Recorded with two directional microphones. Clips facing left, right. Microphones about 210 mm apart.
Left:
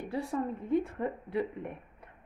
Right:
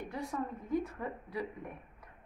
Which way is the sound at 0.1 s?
30° left (ahead or behind).